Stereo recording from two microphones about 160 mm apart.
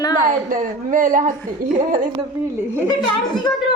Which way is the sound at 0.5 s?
55° right (ahead or behind).